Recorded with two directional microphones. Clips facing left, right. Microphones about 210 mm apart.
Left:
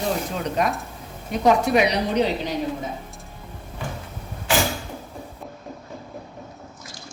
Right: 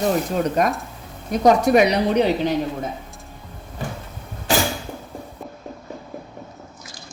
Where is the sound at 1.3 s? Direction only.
45° right (ahead or behind).